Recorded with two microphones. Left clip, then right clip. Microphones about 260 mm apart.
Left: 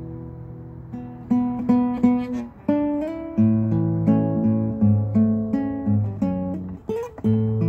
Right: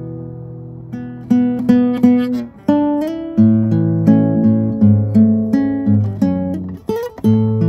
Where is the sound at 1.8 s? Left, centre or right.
Right.